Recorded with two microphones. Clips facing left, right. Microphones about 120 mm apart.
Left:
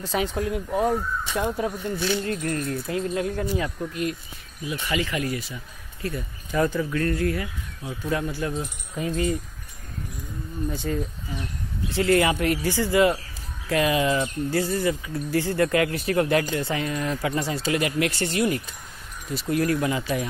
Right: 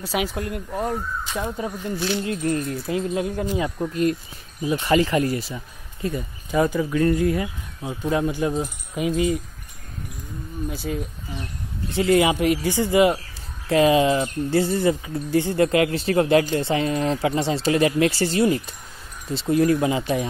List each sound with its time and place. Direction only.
0.0 s speech: 10° right (ahead or behind)
2.2 s speech: 15° right (ahead or behind)
3.8 s speech: 40° right (ahead or behind)
6.0 s speech: 20° right (ahead or behind)
10.7 s speech: 5° right (ahead or behind)
11.9 s speech: 20° right (ahead or behind)